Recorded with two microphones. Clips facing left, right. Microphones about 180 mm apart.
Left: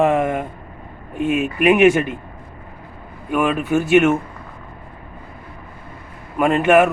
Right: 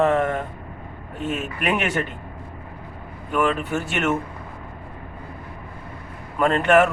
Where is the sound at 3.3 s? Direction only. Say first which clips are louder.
Left 4 dB; 10° left (ahead or behind).